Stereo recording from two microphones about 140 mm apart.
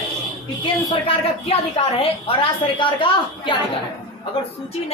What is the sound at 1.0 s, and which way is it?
A woman's voice, 45° left (ahead or behind).